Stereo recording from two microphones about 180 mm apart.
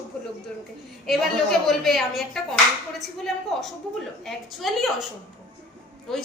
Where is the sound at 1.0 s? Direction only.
Centre (ahead or behind).